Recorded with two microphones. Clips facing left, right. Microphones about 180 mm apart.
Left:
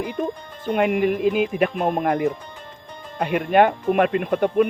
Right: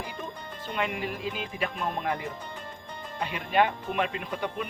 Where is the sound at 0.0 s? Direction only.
55° left (ahead or behind).